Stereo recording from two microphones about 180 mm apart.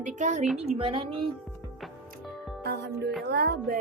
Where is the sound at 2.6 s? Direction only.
65° right (ahead or behind).